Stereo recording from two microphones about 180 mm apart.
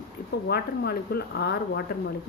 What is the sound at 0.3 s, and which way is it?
A woman's voice, 70° left (ahead or behind).